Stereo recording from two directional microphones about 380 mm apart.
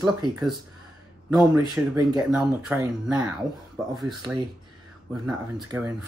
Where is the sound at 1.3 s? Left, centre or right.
Centre.